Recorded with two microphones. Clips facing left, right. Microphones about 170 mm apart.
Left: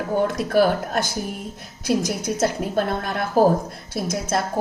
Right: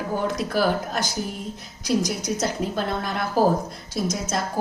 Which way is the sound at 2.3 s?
55° left (ahead or behind).